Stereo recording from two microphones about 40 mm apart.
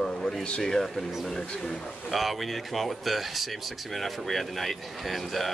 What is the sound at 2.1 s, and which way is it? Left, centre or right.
Speech, centre.